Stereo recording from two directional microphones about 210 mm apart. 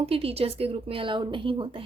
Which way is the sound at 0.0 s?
25° right (ahead or behind).